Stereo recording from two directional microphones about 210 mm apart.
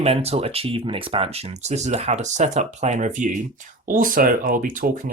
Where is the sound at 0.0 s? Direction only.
30° right (ahead or behind).